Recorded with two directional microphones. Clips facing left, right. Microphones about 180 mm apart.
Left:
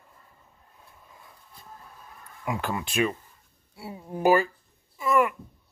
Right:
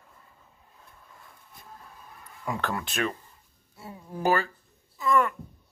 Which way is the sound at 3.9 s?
25° left (ahead or behind).